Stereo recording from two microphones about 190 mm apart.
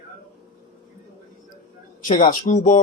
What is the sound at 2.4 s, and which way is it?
Speech, 40° left (ahead or behind).